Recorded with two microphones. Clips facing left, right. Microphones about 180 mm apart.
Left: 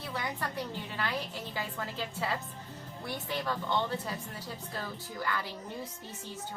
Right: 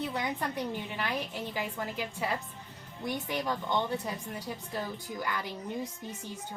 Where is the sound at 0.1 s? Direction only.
20° right (ahead or behind).